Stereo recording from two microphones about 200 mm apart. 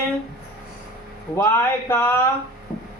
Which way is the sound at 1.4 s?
15° left (ahead or behind).